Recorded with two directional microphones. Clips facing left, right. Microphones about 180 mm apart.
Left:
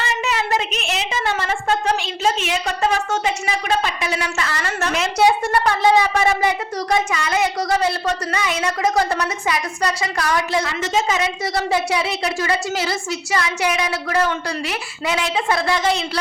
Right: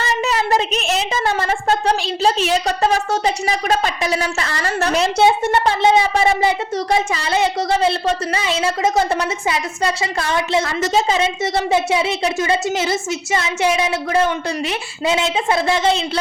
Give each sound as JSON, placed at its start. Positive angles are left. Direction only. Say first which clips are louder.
{"t": 0.0, "sound": "a woman's voice", "louder": "right 3 dB", "side_deg": -35}
{"t": 10.6, "sound": "a woman's voice", "louder": "right 3 dB", "side_deg": -40}